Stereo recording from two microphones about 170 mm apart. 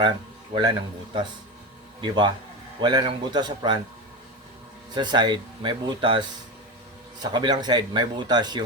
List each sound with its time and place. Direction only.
0.5 s speech: 25° right (ahead or behind)
4.9 s speech: 25° right (ahead or behind)